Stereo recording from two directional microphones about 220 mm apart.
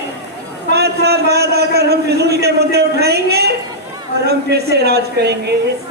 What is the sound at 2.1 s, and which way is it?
A man's voice, 50° right (ahead or behind).